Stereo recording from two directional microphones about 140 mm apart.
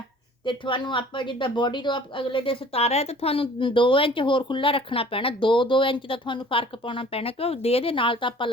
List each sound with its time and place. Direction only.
0.4 s a woman's voice: 35° left (ahead or behind)